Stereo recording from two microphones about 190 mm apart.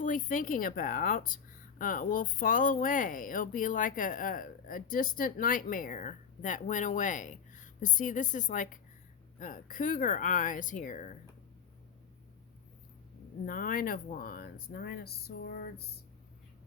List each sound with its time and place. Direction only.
0.0 s speech: 45° left (ahead or behind)
13.4 s speech: 45° left (ahead or behind)